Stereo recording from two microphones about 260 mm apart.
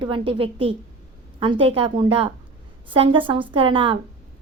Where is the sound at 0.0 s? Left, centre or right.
Centre.